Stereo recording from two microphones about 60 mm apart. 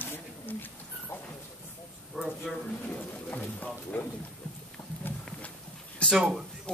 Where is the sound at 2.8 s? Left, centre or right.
Left.